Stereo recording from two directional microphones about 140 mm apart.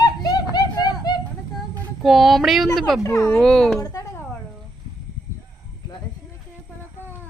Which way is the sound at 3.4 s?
Centre (ahead or behind).